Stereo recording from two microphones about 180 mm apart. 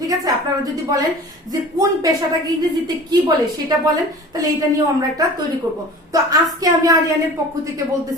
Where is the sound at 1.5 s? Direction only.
20° right (ahead or behind).